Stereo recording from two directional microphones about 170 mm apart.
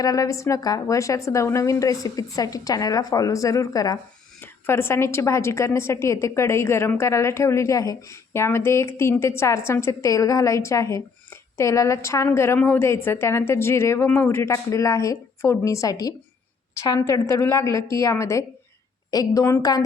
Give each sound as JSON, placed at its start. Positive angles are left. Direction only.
{"t": 0.0, "sound": "a woman's voice", "side_deg": 20}